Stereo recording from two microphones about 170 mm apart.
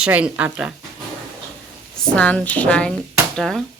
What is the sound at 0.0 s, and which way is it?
Speech, 10° right (ahead or behind).